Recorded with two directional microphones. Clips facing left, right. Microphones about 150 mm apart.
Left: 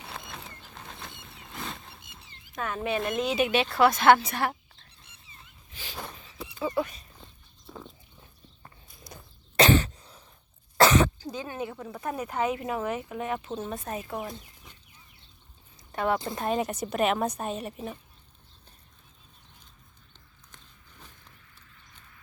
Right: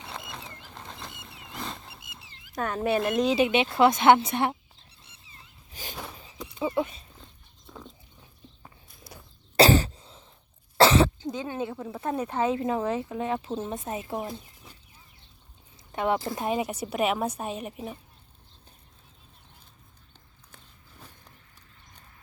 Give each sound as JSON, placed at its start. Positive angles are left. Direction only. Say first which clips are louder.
{"t": 0.3, "sound": "a sound", "louder": "right 2 dB", "side_deg": 0}
{"t": 2.5, "sound": "speech", "louder": "right 4 dB", "side_deg": -40}
{"t": 5.7, "sound": "a sound", "louder": "right 3 dB", "side_deg": -45}
{"t": 6.4, "sound": "a sound", "louder": "even", "side_deg": 5}
{"t": 6.7, "sound": "speech", "louder": "right 1 dB", "side_deg": -25}
{"t": 7.7, "sound": "dog", "louder": "left 1 dB", "side_deg": 5}
{"t": 8.6, "sound": "walk", "louder": "left 3 dB", "side_deg": -5}
{"t": 9.6, "sound": "cough", "louder": "right 2 dB", "side_deg": -35}
{"t": 10.8, "sound": "speech", "louder": "right 2 dB", "side_deg": -30}
{"t": 15.9, "sound": "speech", "louder": "right 1 dB", "side_deg": -20}
{"t": 16.6, "sound": "a woman's voice", "louder": "even", "side_deg": -10}